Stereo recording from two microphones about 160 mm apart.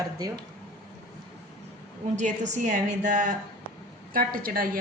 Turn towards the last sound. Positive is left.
turn(degrees=-65)  # may be behind; listen again after turning